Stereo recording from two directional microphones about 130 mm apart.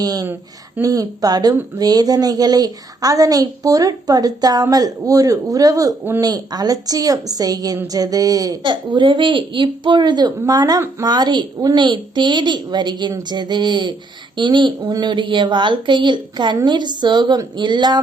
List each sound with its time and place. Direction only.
0.0 s a woman's voice: 30° right (ahead or behind)